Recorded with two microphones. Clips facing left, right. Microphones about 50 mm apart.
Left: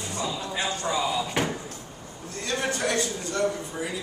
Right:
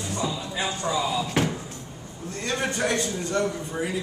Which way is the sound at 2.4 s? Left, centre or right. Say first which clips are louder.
Right 1 dB; centre.